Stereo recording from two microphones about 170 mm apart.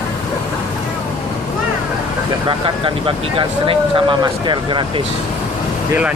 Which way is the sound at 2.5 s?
30° right (ahead or behind).